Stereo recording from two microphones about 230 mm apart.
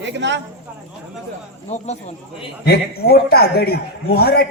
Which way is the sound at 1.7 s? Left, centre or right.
Left.